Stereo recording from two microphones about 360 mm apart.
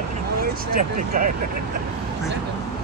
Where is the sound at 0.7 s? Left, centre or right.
Right.